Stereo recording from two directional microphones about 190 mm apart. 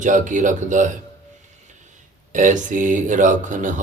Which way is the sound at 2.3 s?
40° right (ahead or behind).